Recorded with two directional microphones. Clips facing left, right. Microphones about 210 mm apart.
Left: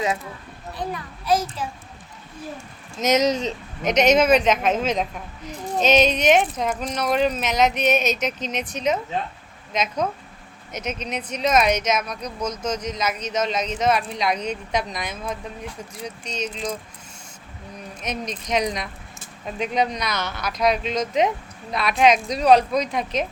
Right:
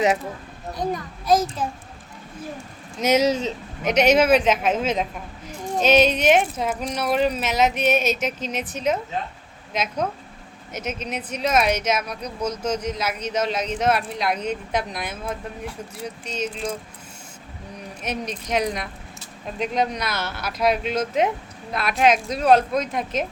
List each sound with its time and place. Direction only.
0.8 s a child's voice: 45° right (ahead or behind)
3.0 s speech: 10° right (ahead or behind)
18.0 s speech: 10° right (ahead or behind)